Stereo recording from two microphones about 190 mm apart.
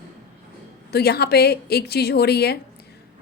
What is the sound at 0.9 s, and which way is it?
A woman's voice, 55° left (ahead or behind).